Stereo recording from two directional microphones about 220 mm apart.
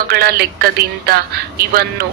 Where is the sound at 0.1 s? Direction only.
45° right (ahead or behind).